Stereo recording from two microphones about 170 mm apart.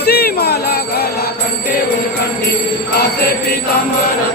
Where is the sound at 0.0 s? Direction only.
65° left (ahead or behind).